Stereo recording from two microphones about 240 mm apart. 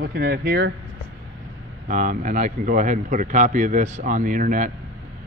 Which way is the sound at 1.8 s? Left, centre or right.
Right.